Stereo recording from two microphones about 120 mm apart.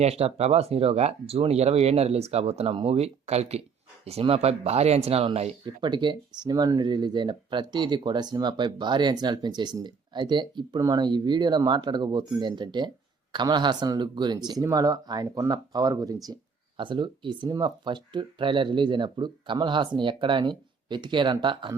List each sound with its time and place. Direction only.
0.0 s speech: 60° right (ahead or behind)
5.6 s speech: 40° right (ahead or behind)
16.7 s speech: 40° right (ahead or behind)